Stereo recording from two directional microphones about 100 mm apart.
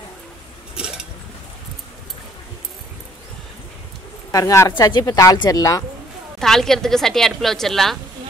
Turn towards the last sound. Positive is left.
turn(degrees=0)  # may be behind; listen again after turning